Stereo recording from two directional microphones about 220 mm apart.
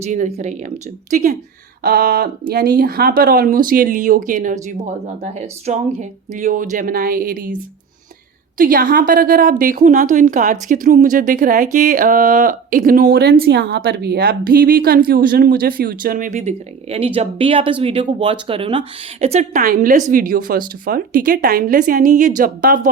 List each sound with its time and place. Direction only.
0.0 s a woman's voice: 30° right (ahead or behind)
1.8 s a sound: 45° right (ahead or behind)
2.5 s a woman's voice: 45° right (ahead or behind)
8.5 s a woman's voice: 40° right (ahead or behind)